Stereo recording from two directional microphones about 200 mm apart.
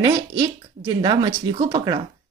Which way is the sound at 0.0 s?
20° right (ahead or behind).